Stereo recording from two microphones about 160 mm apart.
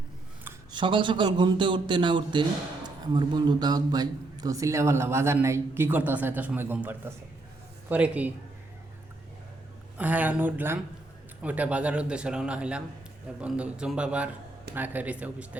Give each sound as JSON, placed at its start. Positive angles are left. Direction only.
{"t": 0.7, "sound": "a man's voice", "side_deg": -30}
{"t": 10.0, "sound": "a man's voice", "side_deg": -10}